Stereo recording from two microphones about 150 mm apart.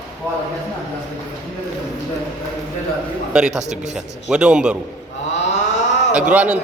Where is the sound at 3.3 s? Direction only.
5° right (ahead or behind).